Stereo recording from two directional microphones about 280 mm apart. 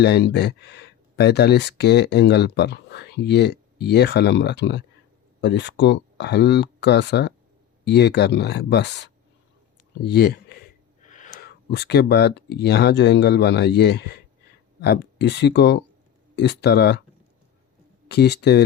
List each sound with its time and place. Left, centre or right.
0.0 s speech: left
18.1 s speech: left